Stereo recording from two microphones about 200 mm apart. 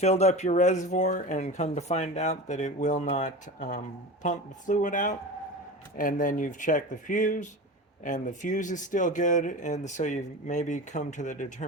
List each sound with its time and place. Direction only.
0.0 s speech: 35° left (ahead or behind)